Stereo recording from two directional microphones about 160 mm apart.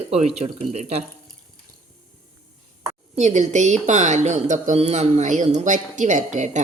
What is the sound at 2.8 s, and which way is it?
Speech, 40° right (ahead or behind).